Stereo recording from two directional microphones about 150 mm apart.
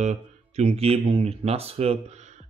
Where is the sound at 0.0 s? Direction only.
50° right (ahead or behind).